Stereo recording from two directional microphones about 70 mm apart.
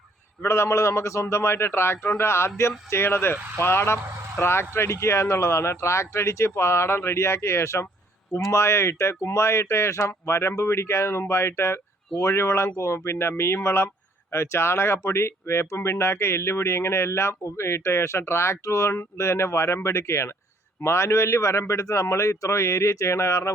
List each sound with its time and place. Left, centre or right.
0.4 s a man's voice: left